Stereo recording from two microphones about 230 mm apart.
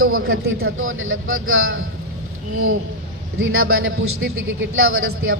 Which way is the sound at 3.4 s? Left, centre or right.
Right.